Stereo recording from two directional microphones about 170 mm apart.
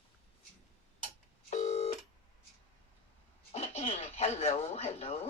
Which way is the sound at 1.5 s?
40° left (ahead or behind).